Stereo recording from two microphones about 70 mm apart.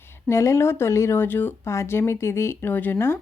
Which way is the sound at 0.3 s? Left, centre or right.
Left.